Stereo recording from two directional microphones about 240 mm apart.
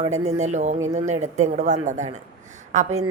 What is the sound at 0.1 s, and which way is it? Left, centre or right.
Speech, right.